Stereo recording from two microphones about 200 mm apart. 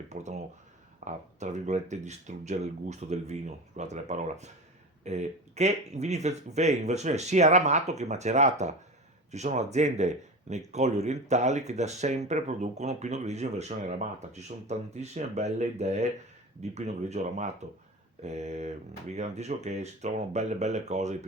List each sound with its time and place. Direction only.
0.1 s speech: 35° right (ahead or behind)